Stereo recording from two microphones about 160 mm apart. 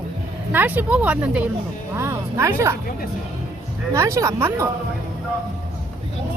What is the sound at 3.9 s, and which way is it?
Speech, 20° right (ahead or behind).